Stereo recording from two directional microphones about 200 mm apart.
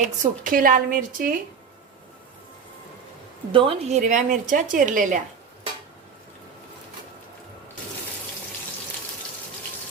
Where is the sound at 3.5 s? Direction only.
25° right (ahead or behind).